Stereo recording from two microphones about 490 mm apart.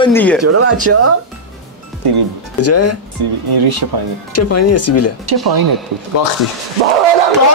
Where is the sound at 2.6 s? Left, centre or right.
Left.